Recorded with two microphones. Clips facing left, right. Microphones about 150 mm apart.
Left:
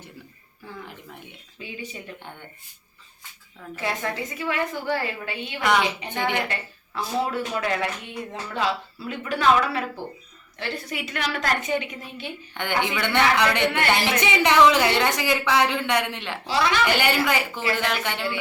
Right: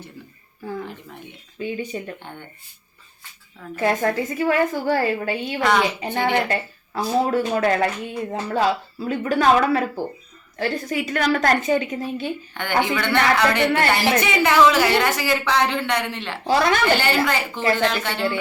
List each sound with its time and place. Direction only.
1.5 s a woman's voice: 50° right (ahead or behind)
3.8 s a woman's voice: 50° right (ahead or behind)
12.5 s a woman's voice: 20° left (ahead or behind)
16.4 s a woman's voice: 50° right (ahead or behind)
16.8 s a woman's voice: 15° left (ahead or behind)